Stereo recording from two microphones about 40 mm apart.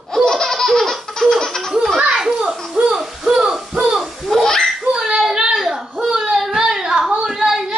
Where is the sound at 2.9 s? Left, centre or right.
Centre.